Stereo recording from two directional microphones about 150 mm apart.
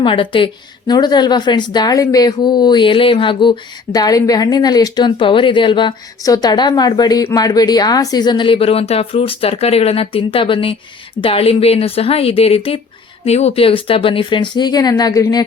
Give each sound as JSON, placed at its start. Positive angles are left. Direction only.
{"t": 0.0, "sound": "a woman's voice", "side_deg": 35}